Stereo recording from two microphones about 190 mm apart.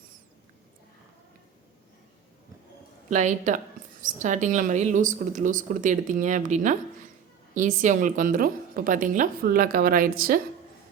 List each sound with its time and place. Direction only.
3.1 s a woman's voice: 40° right (ahead or behind)